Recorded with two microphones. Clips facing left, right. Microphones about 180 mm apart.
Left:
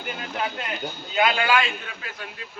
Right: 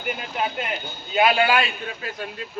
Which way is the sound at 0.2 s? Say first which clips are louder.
Right 2 dB; 20° right (ahead or behind).